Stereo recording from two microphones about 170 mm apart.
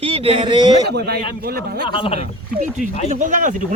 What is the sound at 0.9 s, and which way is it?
Speech, 70° right (ahead or behind).